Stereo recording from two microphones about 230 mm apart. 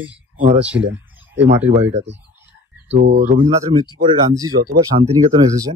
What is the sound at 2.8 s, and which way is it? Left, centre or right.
Speech, right.